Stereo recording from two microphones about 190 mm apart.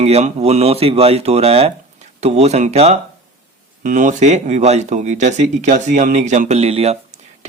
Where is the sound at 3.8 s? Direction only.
45° right (ahead or behind).